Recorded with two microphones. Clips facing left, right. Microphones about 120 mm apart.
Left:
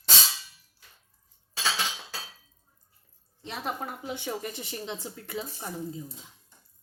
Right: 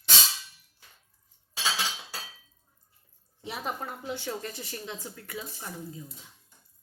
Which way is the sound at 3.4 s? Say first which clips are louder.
Left 1 dB; centre (ahead or behind).